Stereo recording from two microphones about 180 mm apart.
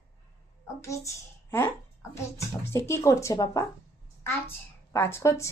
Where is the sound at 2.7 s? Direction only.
15° left (ahead or behind).